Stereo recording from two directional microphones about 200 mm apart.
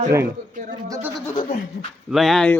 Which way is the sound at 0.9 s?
10° right (ahead or behind).